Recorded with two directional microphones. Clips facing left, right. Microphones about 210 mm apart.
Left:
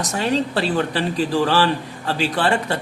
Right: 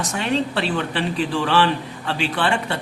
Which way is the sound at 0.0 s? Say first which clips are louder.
Left 1 dB; 40° left (ahead or behind).